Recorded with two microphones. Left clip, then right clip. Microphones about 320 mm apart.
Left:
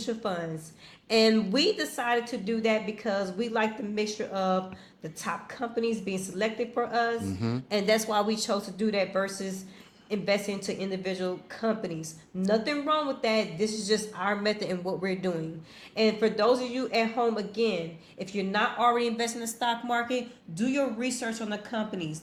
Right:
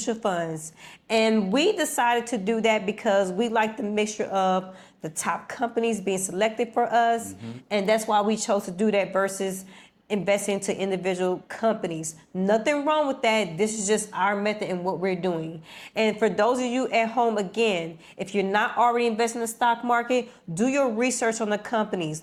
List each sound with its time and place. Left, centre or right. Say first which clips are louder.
0.0 s a woman's voice: right 6 dB; right
18.5 s a woman's voice: right 3 dB; right